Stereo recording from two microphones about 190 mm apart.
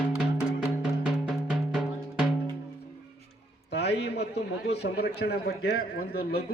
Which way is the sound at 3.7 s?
60° left (ahead or behind).